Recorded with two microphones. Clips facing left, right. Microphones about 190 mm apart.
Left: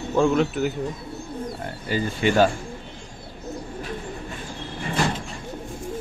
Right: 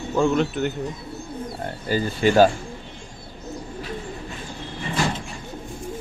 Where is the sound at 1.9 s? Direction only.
35° right (ahead or behind).